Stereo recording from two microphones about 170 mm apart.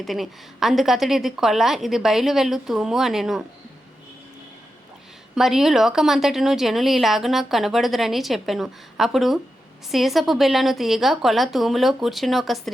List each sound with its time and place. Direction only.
0.0 s a woman's voice: centre (ahead or behind)
5.3 s a woman's voice: centre (ahead or behind)